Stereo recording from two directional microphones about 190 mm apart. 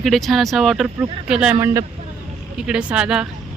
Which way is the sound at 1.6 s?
15° right (ahead or behind).